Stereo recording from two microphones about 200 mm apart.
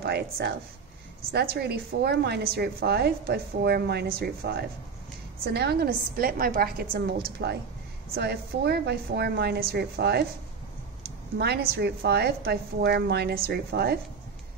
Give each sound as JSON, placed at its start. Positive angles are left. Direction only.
{"t": 0.0, "sound": "a woman's voice", "side_deg": -55}
{"t": 11.3, "sound": "a woman's voice", "side_deg": -55}